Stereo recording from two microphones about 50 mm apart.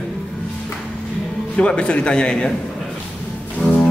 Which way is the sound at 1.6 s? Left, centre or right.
Left.